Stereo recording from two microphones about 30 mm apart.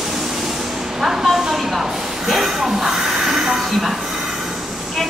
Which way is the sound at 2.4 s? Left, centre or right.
Centre.